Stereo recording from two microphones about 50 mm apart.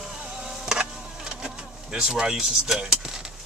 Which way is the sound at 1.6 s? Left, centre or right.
Right.